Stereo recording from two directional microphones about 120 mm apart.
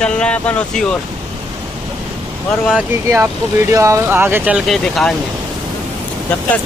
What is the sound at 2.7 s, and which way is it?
Speech, 10° right (ahead or behind).